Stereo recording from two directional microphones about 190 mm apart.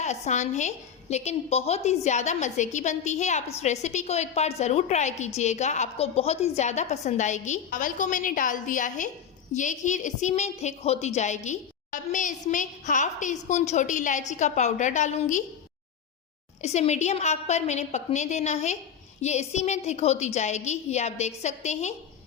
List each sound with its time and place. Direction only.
0.0 s a woman's voice: 40° left (ahead or behind)
16.6 s a woman's voice: 35° left (ahead or behind)